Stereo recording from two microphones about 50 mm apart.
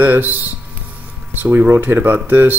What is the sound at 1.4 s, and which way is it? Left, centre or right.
Speech, right.